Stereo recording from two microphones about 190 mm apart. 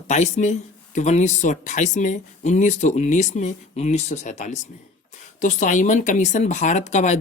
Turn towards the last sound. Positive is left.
turn(degrees=35)  # may be behind; listen again after turning